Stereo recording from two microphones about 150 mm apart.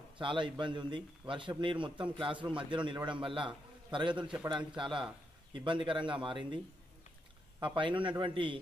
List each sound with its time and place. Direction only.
0.2 s a man's voice: 35° right (ahead or behind)
7.6 s a man's voice: 35° right (ahead or behind)